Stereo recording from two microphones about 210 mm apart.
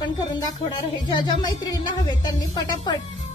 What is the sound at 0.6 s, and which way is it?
A woman's voice, 20° left (ahead or behind).